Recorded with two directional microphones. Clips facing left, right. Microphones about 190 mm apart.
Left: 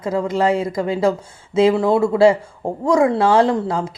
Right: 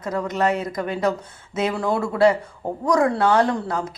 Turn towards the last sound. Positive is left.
turn(degrees=30)  # may be behind; listen again after turning